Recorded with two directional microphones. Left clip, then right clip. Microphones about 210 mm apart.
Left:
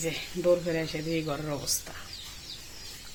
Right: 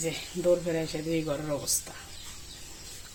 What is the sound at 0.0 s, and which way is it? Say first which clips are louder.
Speech: even; centre (ahead or behind).